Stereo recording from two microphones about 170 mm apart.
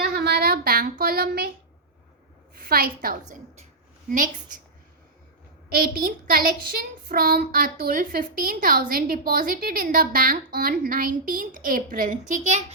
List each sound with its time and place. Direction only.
0.0 s a sound: 70° right (ahead or behind)
2.6 s child singing: 60° right (ahead or behind)
5.7 s child singing: 60° right (ahead or behind)